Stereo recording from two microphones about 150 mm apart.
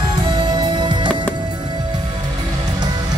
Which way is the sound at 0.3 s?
30° right (ahead or behind).